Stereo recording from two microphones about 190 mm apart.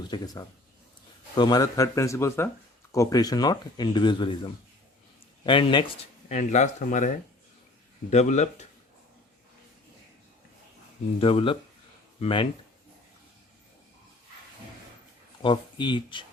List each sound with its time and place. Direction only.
0.1 s speech: 20° left (ahead or behind)
1.4 s speech: 20° left (ahead or behind)
6.2 s speech: 40° left (ahead or behind)
8.1 s speech: 35° left (ahead or behind)
11.2 s speech: 30° left (ahead or behind)
15.4 s speech: 25° left (ahead or behind)